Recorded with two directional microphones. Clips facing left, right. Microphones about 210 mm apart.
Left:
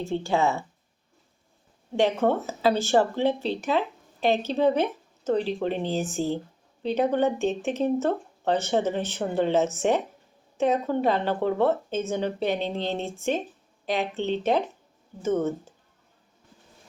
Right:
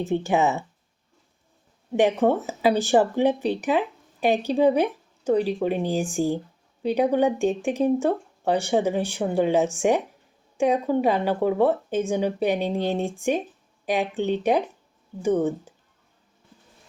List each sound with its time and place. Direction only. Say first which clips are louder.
0.0 s speech: right 3 dB; 20° right (ahead or behind)
1.9 s speech: right 3 dB; 15° right (ahead or behind)